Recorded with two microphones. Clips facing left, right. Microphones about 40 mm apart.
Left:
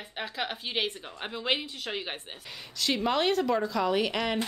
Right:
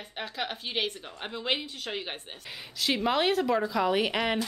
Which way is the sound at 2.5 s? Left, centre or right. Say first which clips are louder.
Right 1 dB; centre.